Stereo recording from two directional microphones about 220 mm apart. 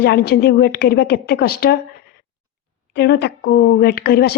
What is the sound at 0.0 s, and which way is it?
A woman's voice, 45° left (ahead or behind).